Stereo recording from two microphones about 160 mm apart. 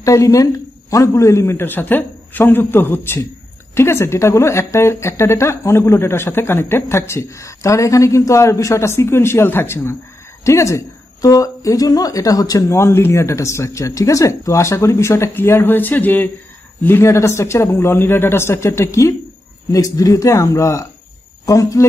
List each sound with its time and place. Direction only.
0.0 s a woman's voice: 20° left (ahead or behind)